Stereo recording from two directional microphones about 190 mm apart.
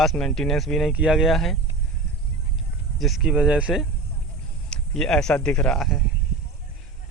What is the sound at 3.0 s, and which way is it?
Speech, centre (ahead or behind).